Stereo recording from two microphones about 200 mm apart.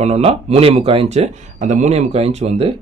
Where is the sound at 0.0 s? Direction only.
30° right (ahead or behind).